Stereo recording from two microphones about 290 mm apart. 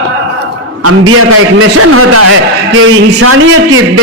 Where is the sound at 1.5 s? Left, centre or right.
Right.